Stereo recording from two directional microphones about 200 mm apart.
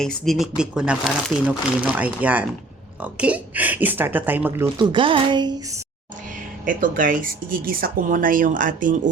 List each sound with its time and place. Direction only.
0.0 s speech: centre (ahead or behind)
4.8 s a woman's voice: 25° right (ahead or behind)
6.7 s speech: 40° right (ahead or behind)